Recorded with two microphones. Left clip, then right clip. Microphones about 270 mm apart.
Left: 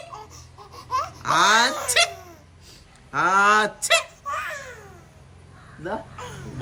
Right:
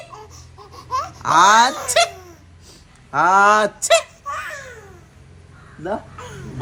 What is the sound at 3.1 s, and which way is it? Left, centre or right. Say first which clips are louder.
Speech: right 5 dB; centre.